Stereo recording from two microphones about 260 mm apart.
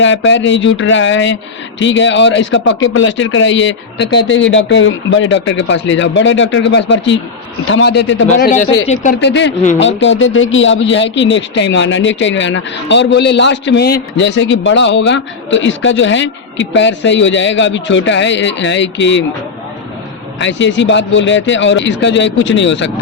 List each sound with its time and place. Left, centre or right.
0.0 s speech: left
8.3 s a man's voice: left
20.4 s speech: left